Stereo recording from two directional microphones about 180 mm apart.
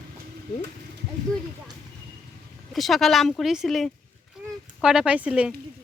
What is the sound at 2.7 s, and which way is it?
A woman's voice, centre (ahead or behind).